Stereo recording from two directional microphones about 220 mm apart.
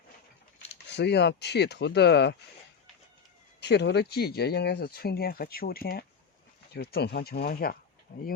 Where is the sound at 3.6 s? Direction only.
50° left (ahead or behind).